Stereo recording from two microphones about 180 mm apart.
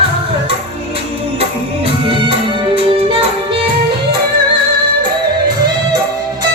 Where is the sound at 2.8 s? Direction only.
30° right (ahead or behind).